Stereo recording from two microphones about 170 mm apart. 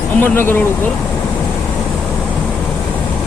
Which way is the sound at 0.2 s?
15° left (ahead or behind).